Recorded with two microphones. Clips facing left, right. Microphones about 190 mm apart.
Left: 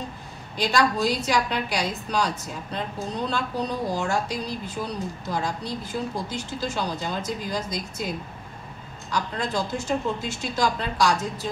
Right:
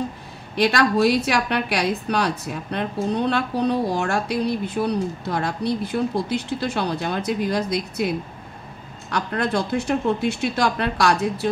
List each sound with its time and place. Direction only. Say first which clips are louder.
0.6 s a woman's voice: right 5 dB; 65° right (ahead or behind)
9.1 s a woman's voice: right 4 dB; 65° right (ahead or behind)